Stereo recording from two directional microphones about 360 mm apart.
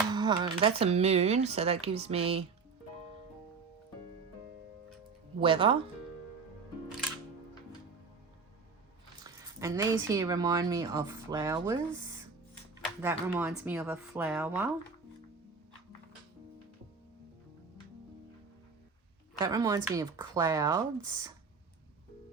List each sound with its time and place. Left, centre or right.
0.1 s speech: centre
5.4 s speech: centre
9.2 s speech: centre
13.0 s speech: centre
19.4 s speech: centre